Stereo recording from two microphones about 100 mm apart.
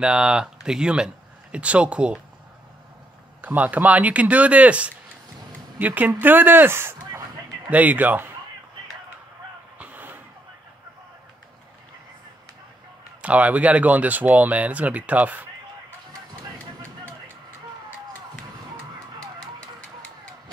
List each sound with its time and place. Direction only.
0.0 s speech: 10° right (ahead or behind)
3.3 s speech: 15° right (ahead or behind)
9.8 s a sound: 15° right (ahead or behind)
13.2 s speech: 15° right (ahead or behind)